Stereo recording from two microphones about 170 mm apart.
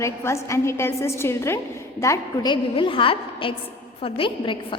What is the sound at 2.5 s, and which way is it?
A woman's voice, 30° left (ahead or behind).